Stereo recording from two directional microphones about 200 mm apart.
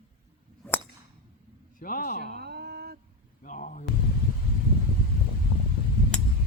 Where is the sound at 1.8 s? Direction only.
45° left (ahead or behind).